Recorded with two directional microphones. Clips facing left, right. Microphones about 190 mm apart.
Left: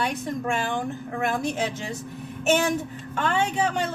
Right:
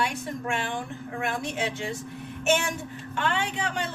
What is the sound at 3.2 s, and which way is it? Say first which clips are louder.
Speech: left 5 dB; 40° left (ahead or behind).